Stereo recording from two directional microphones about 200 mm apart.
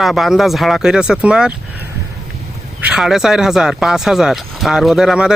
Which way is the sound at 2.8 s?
5° right (ahead or behind).